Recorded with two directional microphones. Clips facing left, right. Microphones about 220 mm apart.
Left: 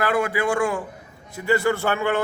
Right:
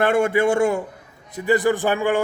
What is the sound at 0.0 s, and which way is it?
A man's voice, 25° right (ahead or behind).